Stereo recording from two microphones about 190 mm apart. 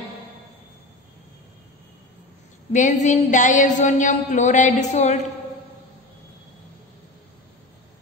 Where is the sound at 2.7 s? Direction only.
40° left (ahead or behind).